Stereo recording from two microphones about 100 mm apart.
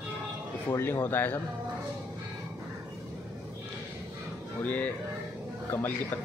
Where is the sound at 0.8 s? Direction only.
20° left (ahead or behind).